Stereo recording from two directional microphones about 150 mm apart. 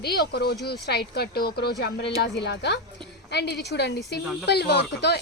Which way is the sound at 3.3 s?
90° left.